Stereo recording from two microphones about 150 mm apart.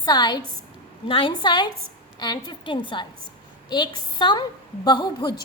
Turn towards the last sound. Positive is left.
turn(degrees=30)  # may be behind; listen again after turning